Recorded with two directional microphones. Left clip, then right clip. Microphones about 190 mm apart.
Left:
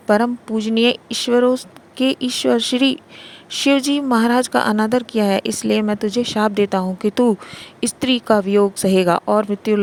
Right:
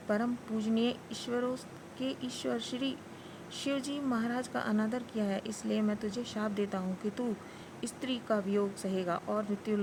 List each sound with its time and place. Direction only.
0.1 s speech: 50° left (ahead or behind)